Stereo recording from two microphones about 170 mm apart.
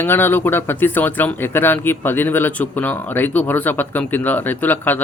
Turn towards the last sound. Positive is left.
turn(degrees=10)  # may be behind; listen again after turning